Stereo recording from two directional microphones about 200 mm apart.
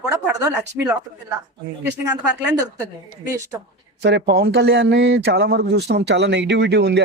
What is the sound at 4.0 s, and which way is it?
Speech, 55° right (ahead or behind).